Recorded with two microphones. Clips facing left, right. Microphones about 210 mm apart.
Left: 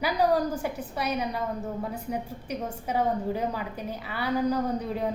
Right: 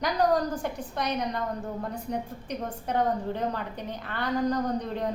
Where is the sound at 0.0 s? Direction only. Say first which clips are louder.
Left 1 dB; 10° left (ahead or behind).